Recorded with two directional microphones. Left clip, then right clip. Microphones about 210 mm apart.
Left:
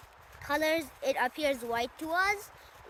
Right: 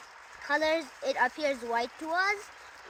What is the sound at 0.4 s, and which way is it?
Speech, 35° left (ahead or behind).